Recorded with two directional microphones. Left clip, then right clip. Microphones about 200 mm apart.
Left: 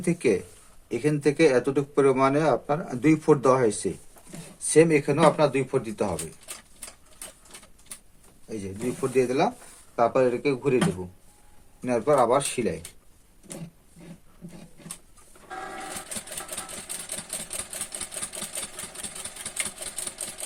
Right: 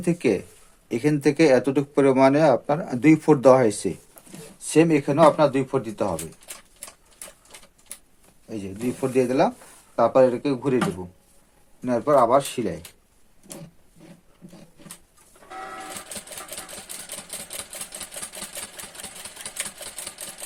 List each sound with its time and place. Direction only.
0.0 s speech: 40° right (ahead or behind)
9.0 s speech: 45° right (ahead or behind)
11.9 s speech: 25° right (ahead or behind)